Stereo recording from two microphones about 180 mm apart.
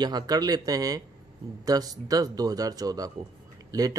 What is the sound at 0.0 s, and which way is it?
A man's voice, 20° right (ahead or behind).